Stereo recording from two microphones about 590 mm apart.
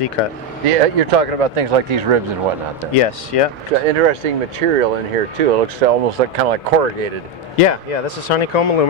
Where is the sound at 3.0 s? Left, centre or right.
Left.